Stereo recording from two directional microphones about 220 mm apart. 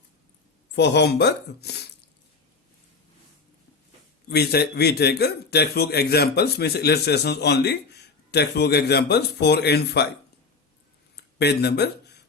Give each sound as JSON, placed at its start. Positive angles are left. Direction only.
{"t": 0.8, "sound": "speech", "side_deg": 50}
{"t": 4.3, "sound": "speech", "side_deg": 45}
{"t": 11.3, "sound": "speech", "side_deg": 50}